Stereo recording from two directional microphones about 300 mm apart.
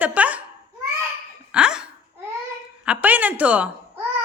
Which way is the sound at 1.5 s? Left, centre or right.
Centre.